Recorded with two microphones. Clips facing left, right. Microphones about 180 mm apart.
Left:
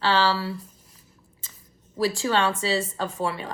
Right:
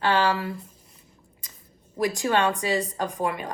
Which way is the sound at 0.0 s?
15° right (ahead or behind).